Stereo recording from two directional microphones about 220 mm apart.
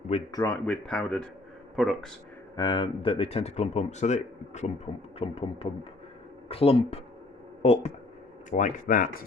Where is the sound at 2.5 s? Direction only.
20° left (ahead or behind).